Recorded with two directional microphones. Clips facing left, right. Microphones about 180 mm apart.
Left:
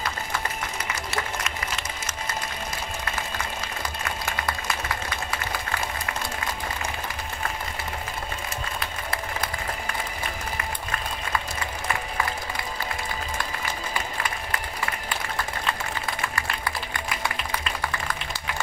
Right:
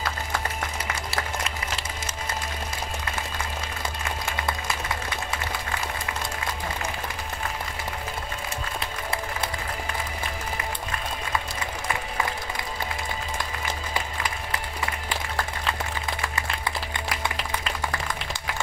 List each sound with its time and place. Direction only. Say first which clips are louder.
1.1 s applause: left 1 dB; 30° right (ahead or behind)
8.7 s applause: right 1 dB; 30° right (ahead or behind)